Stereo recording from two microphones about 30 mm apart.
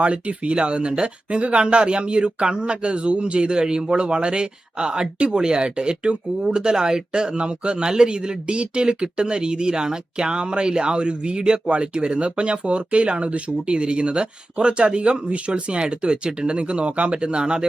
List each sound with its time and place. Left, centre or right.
0.0 s speech: right